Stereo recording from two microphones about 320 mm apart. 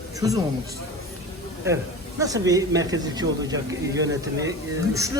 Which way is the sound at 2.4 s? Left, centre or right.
Centre.